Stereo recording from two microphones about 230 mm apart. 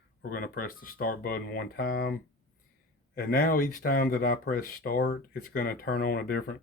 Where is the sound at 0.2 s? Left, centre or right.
Left.